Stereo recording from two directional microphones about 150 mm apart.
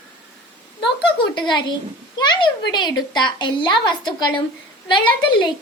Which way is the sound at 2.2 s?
30° left (ahead or behind).